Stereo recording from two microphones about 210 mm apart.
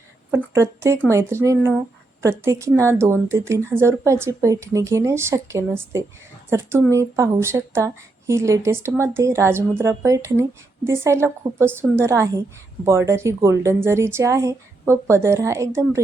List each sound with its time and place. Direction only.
0.3 s a woman's voice: 10° right (ahead or behind)